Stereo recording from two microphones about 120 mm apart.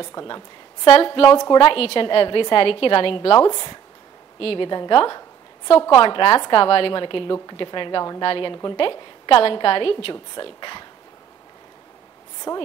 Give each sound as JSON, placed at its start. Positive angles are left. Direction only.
{"t": 0.0, "sound": "a woman's voice", "side_deg": 30}
{"t": 0.8, "sound": "a woman's voice", "side_deg": 50}
{"t": 4.4, "sound": "a woman's voice", "side_deg": 50}
{"t": 4.6, "sound": "a woman's voice", "side_deg": 40}
{"t": 12.5, "sound": "a woman's voice", "side_deg": 20}